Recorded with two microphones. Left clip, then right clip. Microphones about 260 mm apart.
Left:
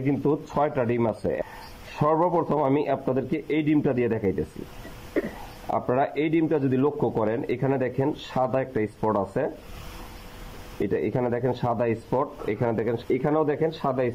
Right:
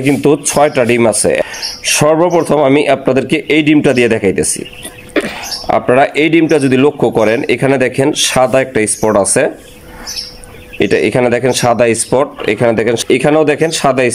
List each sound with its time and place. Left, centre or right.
0.0 s speech: right
5.7 s speech: right
10.8 s speech: right